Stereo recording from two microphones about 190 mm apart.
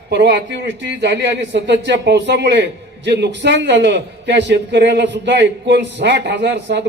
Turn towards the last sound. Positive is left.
turn(degrees=-65)  # may be behind; listen again after turning